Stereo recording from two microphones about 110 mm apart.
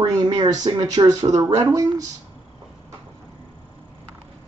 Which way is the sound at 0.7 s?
40° right (ahead or behind).